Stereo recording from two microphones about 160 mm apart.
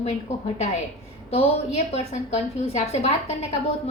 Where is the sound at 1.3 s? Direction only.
40° left (ahead or behind).